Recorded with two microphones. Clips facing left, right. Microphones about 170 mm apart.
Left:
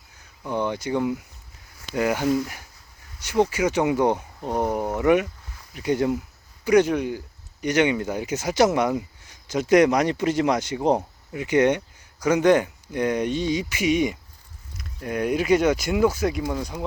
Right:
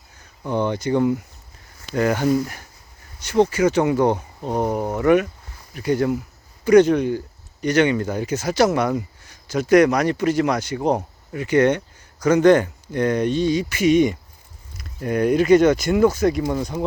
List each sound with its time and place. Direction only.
0.5 s speech: 5° left (ahead or behind)
4.1 s speech: 15° right (ahead or behind)
4.9 s speech: 15° left (ahead or behind)
6.7 s speech: 5° left (ahead or behind)